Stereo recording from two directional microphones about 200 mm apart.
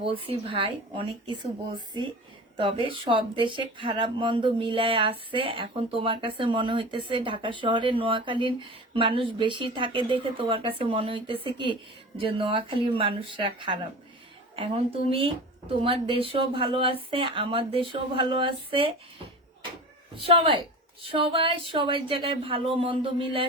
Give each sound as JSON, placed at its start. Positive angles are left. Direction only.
{"t": 0.0, "sound": "speech", "side_deg": -25}
{"t": 2.6, "sound": "speech", "side_deg": -25}
{"t": 20.2, "sound": "speech", "side_deg": -25}